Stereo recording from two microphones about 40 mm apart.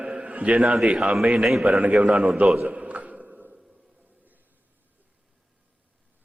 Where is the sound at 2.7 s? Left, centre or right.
Right.